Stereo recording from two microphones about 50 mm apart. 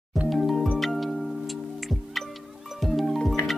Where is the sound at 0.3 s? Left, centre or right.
Centre.